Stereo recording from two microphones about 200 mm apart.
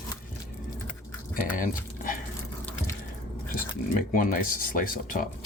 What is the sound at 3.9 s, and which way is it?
Speech, 45° left (ahead or behind).